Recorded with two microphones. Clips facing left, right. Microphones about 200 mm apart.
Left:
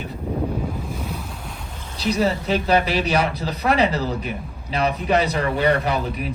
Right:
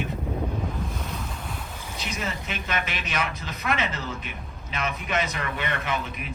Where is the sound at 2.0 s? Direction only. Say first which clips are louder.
Left 12 dB; 35° left (ahead or behind).